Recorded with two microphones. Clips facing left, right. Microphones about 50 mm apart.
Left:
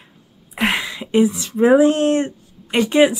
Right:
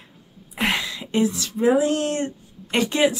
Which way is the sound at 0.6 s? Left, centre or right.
Left.